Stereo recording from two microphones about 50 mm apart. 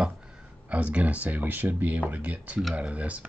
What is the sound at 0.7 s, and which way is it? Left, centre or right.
Speech, right.